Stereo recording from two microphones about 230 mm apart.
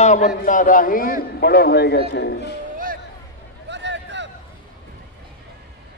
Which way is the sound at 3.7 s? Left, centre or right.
Right.